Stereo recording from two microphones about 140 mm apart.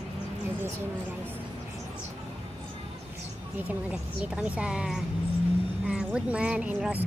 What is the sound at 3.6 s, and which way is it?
A woman's voice, 10° right (ahead or behind).